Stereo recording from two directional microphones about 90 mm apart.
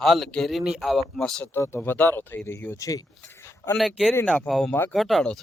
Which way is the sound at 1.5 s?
30° left (ahead or behind).